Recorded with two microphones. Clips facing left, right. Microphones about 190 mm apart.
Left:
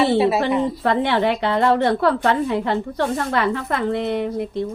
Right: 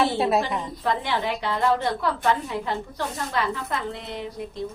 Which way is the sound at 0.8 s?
65° left (ahead or behind).